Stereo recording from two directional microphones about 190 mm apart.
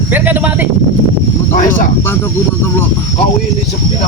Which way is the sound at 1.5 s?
45° left (ahead or behind).